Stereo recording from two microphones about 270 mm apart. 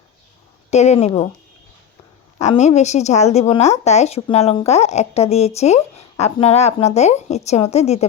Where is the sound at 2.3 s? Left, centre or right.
Left.